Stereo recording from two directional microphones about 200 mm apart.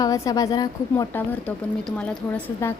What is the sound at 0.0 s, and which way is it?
A woman's voice, 20° left (ahead or behind).